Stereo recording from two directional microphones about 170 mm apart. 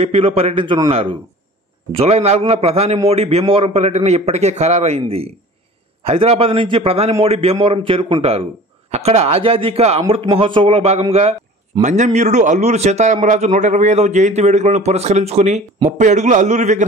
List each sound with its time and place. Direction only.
0.0 s a man's voice: 35° right (ahead or behind)